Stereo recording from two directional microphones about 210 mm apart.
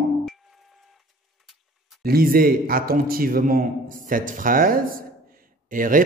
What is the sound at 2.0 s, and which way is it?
Speech, 45° right (ahead or behind).